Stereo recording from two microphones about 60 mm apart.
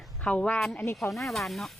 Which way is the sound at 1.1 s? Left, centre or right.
Centre.